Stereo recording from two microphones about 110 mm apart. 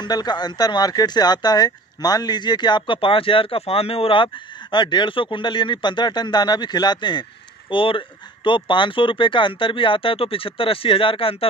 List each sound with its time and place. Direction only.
0.0 s speech: 40° left (ahead or behind); by 11.4 s 55° left (ahead or behind)